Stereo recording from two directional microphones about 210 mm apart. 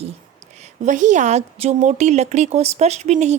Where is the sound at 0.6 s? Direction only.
35° right (ahead or behind).